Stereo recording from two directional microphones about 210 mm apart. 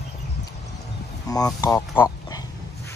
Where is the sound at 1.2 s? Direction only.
15° left (ahead or behind).